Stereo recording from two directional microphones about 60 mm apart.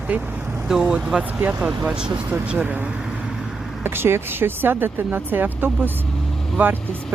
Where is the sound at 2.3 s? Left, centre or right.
Right.